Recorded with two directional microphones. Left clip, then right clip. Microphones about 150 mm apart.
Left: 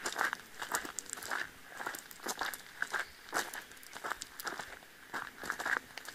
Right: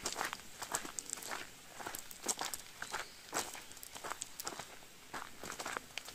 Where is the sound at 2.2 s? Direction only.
5° right (ahead or behind).